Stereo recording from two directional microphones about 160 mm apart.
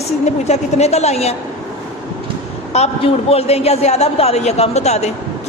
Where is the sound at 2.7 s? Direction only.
40° left (ahead or behind).